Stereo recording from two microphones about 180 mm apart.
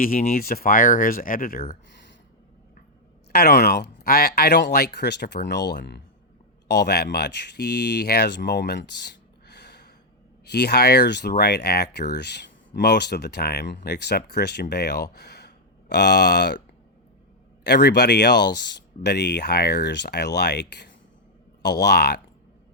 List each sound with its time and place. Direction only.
0.0 s speech: 50° left (ahead or behind)
3.3 s speech: 65° left (ahead or behind)
17.6 s speech: 70° left (ahead or behind)